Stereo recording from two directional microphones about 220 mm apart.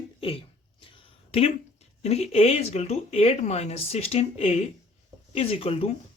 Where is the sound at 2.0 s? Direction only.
30° left (ahead or behind).